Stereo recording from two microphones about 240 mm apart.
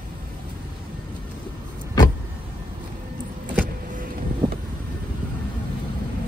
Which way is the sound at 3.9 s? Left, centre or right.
Right.